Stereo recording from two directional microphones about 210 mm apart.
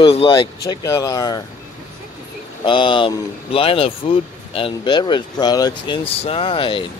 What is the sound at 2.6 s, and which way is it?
Speech, 25° left (ahead or behind).